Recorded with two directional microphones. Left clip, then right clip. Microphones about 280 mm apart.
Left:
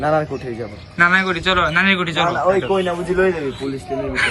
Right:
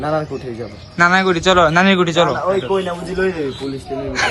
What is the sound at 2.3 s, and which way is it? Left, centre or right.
Speech, left.